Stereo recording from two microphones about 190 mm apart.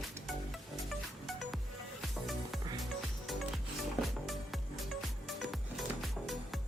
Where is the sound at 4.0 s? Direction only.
Centre (ahead or behind).